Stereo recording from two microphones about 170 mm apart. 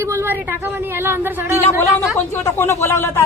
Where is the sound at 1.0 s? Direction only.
15° right (ahead or behind).